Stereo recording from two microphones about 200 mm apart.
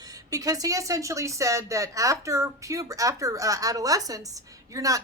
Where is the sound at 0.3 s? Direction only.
15° right (ahead or behind).